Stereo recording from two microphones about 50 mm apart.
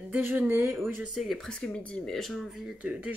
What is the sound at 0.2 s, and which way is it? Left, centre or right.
Speech, right.